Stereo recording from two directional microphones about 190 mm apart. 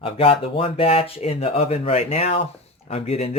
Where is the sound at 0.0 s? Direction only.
30° left (ahead or behind).